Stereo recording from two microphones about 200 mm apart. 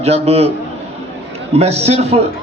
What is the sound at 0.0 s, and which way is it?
Speech, 30° right (ahead or behind).